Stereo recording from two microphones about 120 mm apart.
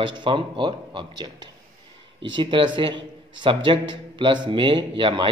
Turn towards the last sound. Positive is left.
turn(degrees=-45)  # may be behind; listen again after turning